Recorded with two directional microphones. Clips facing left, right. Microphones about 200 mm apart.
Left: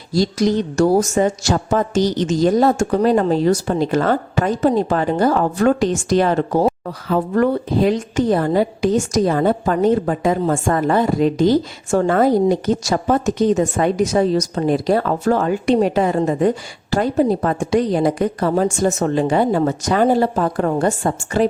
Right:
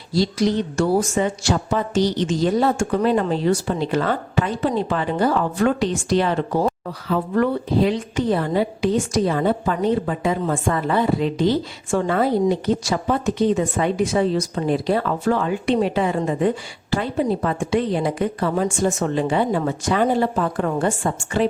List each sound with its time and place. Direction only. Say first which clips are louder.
0.1 s speech: left 3 dB; 45° left (ahead or behind)